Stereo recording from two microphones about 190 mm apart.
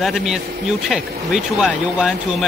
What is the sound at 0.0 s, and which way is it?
Speech, centre (ahead or behind).